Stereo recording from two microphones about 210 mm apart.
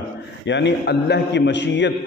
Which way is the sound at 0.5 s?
55° left (ahead or behind).